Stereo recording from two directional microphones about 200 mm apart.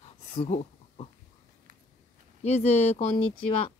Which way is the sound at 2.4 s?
35° left (ahead or behind).